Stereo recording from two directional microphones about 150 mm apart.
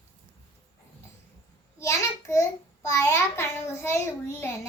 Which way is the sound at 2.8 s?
20° left (ahead or behind).